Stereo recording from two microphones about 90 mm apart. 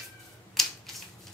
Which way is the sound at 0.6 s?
5° left (ahead or behind).